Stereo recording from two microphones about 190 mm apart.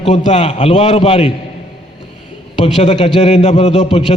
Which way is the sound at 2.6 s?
35° left (ahead or behind).